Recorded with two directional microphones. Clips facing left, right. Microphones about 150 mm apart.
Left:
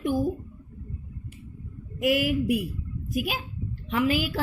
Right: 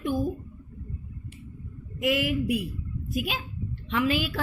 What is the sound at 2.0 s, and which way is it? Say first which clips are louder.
Speech: left 2 dB; 45° left (ahead or behind).